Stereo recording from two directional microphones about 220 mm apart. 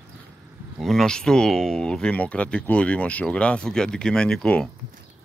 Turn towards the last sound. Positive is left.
turn(degrees=5)  # may be behind; listen again after turning